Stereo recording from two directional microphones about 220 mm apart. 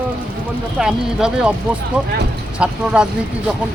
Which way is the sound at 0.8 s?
5° right (ahead or behind).